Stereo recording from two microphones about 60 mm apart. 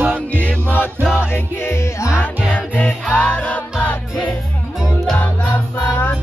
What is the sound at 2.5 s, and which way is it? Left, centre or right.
Music, left.